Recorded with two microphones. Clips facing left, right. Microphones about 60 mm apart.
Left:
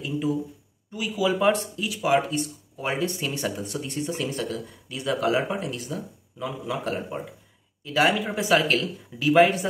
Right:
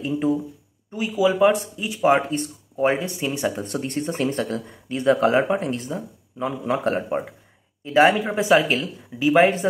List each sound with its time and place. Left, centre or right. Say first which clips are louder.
0.0 s speech: right 4 dB; right
3.0 s speech: right 2 dB; centre
3.5 s speech: right 4 dB; right